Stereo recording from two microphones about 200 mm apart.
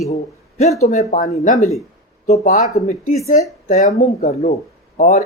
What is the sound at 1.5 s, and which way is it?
Speech, centre (ahead or behind).